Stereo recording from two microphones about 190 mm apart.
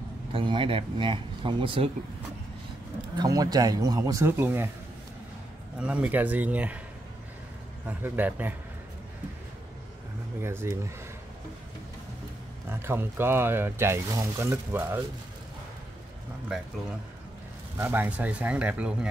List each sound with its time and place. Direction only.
0.3 s speech: 25° right (ahead or behind)
3.2 s speech: 20° right (ahead or behind)
5.8 s speech: 5° right (ahead or behind)
7.8 s speech: 10° right (ahead or behind)
10.4 s speech: 15° right (ahead or behind)
12.6 s speech: 10° right (ahead or behind)
17.7 s speech: 10° right (ahead or behind)